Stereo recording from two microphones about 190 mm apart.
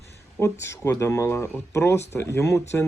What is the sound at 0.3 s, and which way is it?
Speech, 15° left (ahead or behind).